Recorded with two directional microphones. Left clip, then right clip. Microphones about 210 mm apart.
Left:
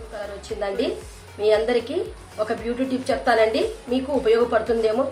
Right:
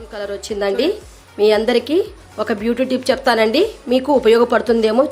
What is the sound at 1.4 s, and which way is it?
A woman's voice, 50° right (ahead or behind).